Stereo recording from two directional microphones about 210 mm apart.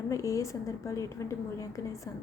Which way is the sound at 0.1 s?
15° left (ahead or behind).